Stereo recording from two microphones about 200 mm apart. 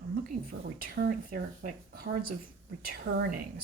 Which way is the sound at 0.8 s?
50° right (ahead or behind).